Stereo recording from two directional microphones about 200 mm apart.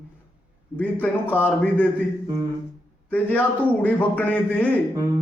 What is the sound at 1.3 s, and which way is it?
Speech, 10° left (ahead or behind).